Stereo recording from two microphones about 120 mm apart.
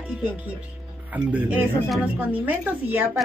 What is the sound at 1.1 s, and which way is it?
Speech, 10° right (ahead or behind).